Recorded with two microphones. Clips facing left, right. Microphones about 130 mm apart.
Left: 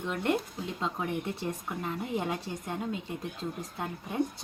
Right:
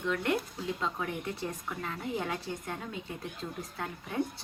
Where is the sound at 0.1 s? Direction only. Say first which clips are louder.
Left 1 dB; 20° left (ahead or behind).